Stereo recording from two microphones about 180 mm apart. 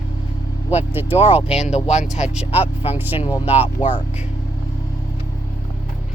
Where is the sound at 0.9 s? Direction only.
10° right (ahead or behind).